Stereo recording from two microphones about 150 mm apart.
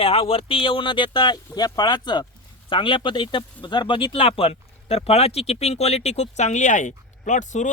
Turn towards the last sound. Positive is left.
turn(degrees=55)  # may be behind; listen again after turning